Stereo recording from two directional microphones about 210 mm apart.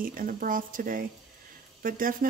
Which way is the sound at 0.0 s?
40° right (ahead or behind).